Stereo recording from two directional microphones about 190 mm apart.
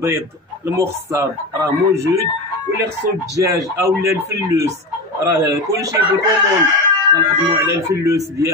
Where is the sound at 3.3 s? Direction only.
15° right (ahead or behind).